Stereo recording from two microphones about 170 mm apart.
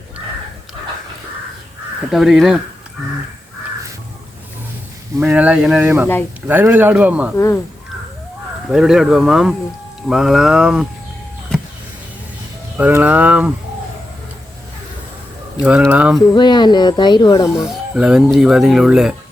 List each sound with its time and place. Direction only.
2.0 s speech: centre (ahead or behind)
5.2 s speech: 5° right (ahead or behind)
7.3 s speech: 15° left (ahead or behind)
8.7 s speech: 5° right (ahead or behind)
12.7 s speech: 10° right (ahead or behind)
15.9 s speech: 5° right (ahead or behind)
16.3 s speech: 25° left (ahead or behind)
17.5 s speech: 5° right (ahead or behind)